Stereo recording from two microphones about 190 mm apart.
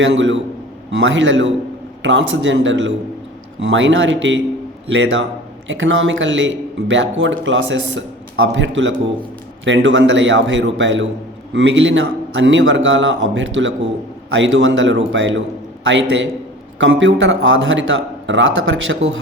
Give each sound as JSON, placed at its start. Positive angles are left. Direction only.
{"t": 0.0, "sound": "speech", "side_deg": -75}